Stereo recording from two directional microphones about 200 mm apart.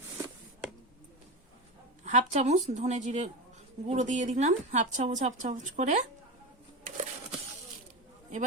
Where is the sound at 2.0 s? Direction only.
35° right (ahead or behind).